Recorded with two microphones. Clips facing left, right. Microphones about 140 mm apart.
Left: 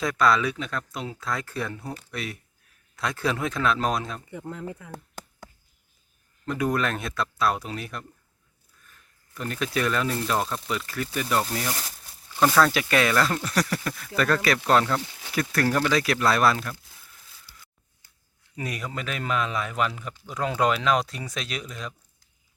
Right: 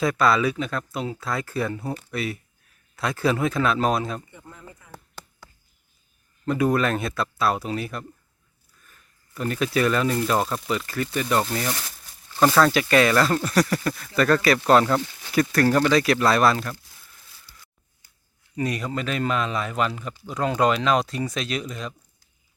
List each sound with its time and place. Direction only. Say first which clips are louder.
0.0 s speech: right 2 dB; 5° right (ahead or behind)
4.3 s speech: left 10 dB; 85° left; by 5.5 s 50° left (ahead or behind)
6.4 s speech: right 4 dB; 5° right (ahead or behind)
9.3 s speech: right 4 dB; 5° right (ahead or behind)
17.5 s a sound: even; 15° left (ahead or behind)
18.5 s speech: right 6 dB; 5° left (ahead or behind)